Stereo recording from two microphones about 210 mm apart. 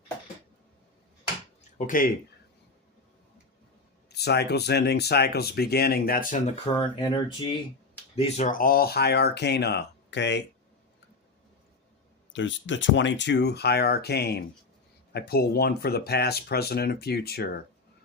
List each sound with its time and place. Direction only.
1.8 s speech: 40° left (ahead or behind)
4.1 s speech: 50° left (ahead or behind)
6.7 s speech: 25° left (ahead or behind)
8.1 s speech: 35° left (ahead or behind); by 10.4 s 55° left (ahead or behind)
12.3 s speech: 60° left (ahead or behind)